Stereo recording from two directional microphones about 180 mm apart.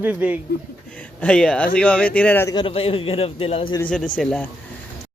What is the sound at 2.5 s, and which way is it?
A man's voice, 30° left (ahead or behind).